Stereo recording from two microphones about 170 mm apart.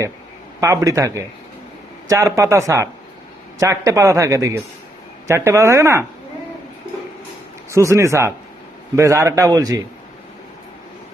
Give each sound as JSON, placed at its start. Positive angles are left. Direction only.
{"t": 0.6, "sound": "a man's voice", "side_deg": -20}
{"t": 7.7, "sound": "a man's voice", "side_deg": -15}